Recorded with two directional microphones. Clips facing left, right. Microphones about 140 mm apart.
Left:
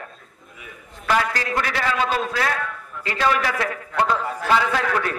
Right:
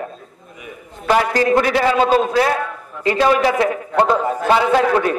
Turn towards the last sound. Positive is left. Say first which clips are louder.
# right 8 dB
turn(degrees=-25)  # may be behind; listen again after turning